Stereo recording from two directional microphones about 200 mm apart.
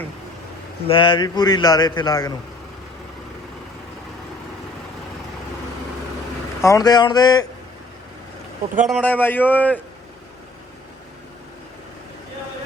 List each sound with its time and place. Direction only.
0.9 s speech: 25° left (ahead or behind)
6.6 s speech: 15° left (ahead or behind)
8.9 s a man's voice: 5° left (ahead or behind)